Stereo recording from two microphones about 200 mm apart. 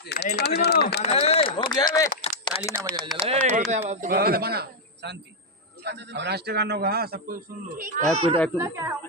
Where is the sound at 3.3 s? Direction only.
35° right (ahead or behind).